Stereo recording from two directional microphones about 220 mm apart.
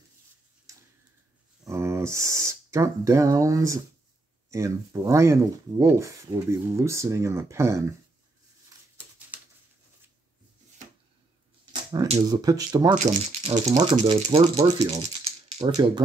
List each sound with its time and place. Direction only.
1.6 s speech: 15° right (ahead or behind)
9.3 s bird: 5° right (ahead or behind)
11.7 s speech: 20° right (ahead or behind)
12.9 s speech: 30° right (ahead or behind)